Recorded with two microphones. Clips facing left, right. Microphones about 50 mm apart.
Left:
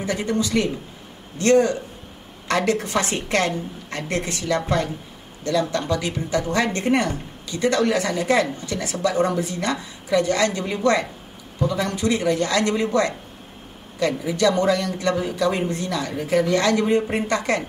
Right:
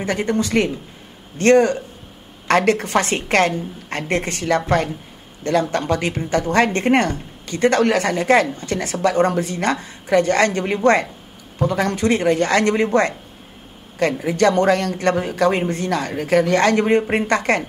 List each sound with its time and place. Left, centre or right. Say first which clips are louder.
0.0 s speech: right 3 dB; right
11.5 s speech: right 4 dB; right